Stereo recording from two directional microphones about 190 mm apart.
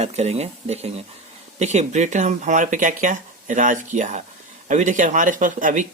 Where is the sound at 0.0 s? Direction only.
35° right (ahead or behind).